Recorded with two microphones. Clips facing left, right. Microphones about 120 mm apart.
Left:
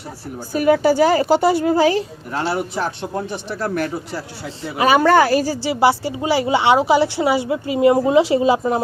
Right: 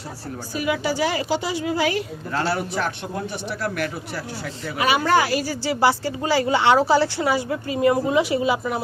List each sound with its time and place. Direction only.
0.5 s a woman's voice: 45° left (ahead or behind)
2.3 s a woman's voice: 20° left (ahead or behind)
3.5 s speech: 40° left (ahead or behind)
4.9 s a woman's voice: 50° left (ahead or behind)
5.6 s a woman's voice: 25° left (ahead or behind)